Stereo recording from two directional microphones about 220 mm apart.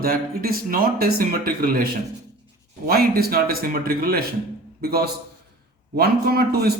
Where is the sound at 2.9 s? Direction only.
45° right (ahead or behind).